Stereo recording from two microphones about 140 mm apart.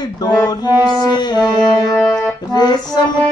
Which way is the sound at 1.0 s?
30° left (ahead or behind).